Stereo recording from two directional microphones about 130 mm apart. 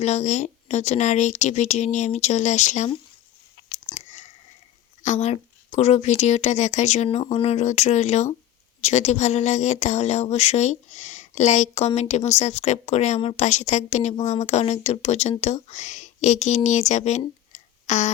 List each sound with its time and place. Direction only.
0.0 s speech: 60° left (ahead or behind)
3.9 s chewing: 60° left (ahead or behind)
5.0 s speech: 60° left (ahead or behind)